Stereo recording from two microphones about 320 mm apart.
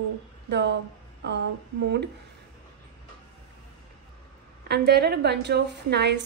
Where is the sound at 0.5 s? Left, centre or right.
Right.